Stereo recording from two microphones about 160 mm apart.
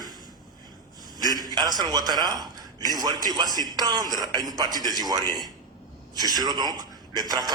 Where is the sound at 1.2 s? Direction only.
25° right (ahead or behind).